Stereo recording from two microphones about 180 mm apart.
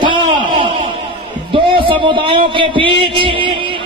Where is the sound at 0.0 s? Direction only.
25° right (ahead or behind).